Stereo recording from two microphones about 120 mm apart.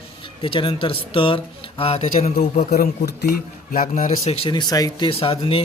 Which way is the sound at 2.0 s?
70° left (ahead or behind).